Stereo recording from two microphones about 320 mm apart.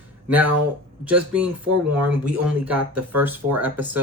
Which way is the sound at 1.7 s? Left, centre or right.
Right.